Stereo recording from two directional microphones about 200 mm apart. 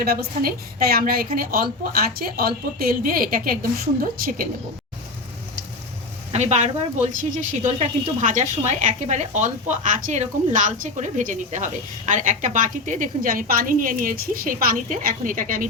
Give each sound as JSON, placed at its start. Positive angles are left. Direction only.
{"t": 0.0, "sound": "a woman's voice", "side_deg": -50}
{"t": 6.3, "sound": "speech", "side_deg": -35}